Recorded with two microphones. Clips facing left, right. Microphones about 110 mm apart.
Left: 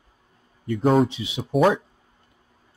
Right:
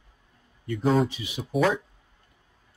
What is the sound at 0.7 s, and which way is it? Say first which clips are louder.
Speech: left 4 dB; 50° left (ahead or behind).